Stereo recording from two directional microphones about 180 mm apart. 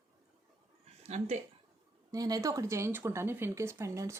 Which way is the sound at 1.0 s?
35° right (ahead or behind).